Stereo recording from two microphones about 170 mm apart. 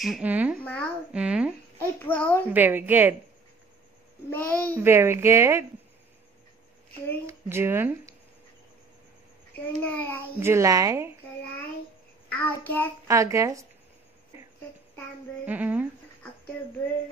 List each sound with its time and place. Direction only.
0.0 s speech: 5° right (ahead or behind)
0.6 s a child's voice: 10° left (ahead or behind)
1.1 s speech: 5° right (ahead or behind)
1.8 s a child's voice: 10° left (ahead or behind)
2.5 s speech: 10° right (ahead or behind)
4.3 s a child's voice: 10° left (ahead or behind)
4.8 s speech: 15° right (ahead or behind)
7.2 s speech: 15° right (ahead or behind)
9.8 s a child's voice: 10° left (ahead or behind)
10.4 s speech: 15° right (ahead or behind)
12.3 s a child's voice: 10° left (ahead or behind)
13.1 s speech: 15° right (ahead or behind)
15.4 s speech: 10° right (ahead or behind)